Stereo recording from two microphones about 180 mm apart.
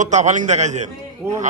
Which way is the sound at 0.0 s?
40° right (ahead or behind).